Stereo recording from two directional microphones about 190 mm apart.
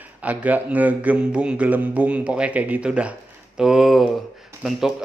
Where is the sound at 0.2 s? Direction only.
10° right (ahead or behind).